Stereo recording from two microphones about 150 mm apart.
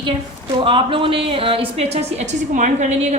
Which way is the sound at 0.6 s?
35° right (ahead or behind).